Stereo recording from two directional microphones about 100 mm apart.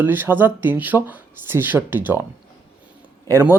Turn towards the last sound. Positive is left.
turn(degrees=-25)  # may be behind; listen again after turning